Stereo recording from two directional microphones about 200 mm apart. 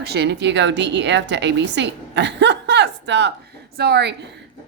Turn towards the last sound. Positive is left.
turn(degrees=-55)  # may be behind; listen again after turning